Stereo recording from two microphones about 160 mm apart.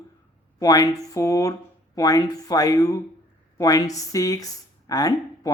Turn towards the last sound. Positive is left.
turn(degrees=25)  # may be behind; listen again after turning